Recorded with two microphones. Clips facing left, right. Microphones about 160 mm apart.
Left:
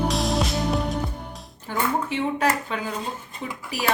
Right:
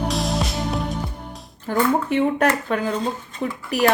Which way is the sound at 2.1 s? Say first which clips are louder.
Right 5 dB; 55° right (ahead or behind).